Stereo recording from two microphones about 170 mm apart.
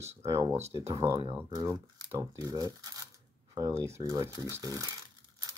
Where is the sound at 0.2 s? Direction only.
15° right (ahead or behind).